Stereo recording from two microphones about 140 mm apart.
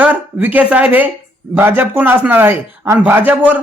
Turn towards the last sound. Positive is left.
turn(degrees=-15)  # may be behind; listen again after turning